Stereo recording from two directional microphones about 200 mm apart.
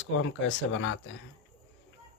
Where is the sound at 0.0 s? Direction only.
70° left (ahead or behind).